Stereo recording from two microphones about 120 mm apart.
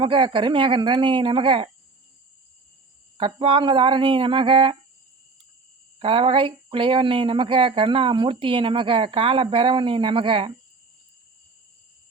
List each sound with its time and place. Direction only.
0.0 s speech: 45° right (ahead or behind)
3.2 s speech: 45° right (ahead or behind)
6.0 s speech: 50° right (ahead or behind)